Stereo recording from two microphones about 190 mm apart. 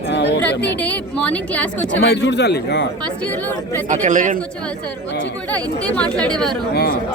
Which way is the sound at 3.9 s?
40° right (ahead or behind).